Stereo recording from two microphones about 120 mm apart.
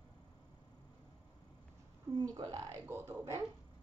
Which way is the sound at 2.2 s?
35° right (ahead or behind).